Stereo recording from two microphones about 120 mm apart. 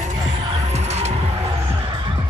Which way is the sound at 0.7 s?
65° right (ahead or behind).